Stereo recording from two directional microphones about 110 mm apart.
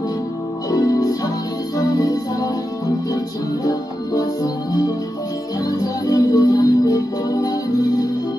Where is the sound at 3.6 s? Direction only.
35° left (ahead or behind).